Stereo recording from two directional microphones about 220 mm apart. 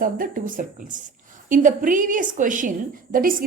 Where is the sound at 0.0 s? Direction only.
40° right (ahead or behind).